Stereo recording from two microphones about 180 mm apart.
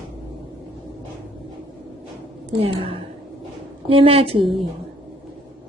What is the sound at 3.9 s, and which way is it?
Speech, 30° right (ahead or behind).